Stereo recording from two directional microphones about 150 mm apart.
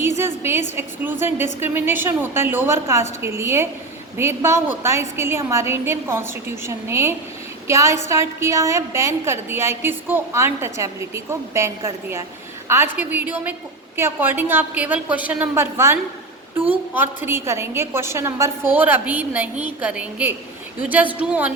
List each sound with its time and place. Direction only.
0.2 s a woman's voice: 15° right (ahead or behind)